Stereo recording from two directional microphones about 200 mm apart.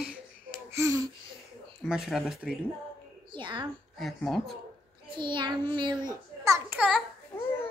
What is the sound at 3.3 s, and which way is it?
Speech, 25° right (ahead or behind).